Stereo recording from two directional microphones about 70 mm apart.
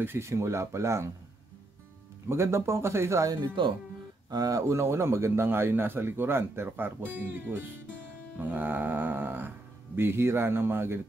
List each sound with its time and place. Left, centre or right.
0.0 s speech: right
2.2 s speech: right
4.3 s speech: right
4.6 s speech: right
8.4 s a sound: right
9.9 s speech: right